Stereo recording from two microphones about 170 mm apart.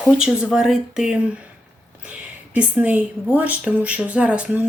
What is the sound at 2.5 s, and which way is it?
A woman's voice, 10° right (ahead or behind).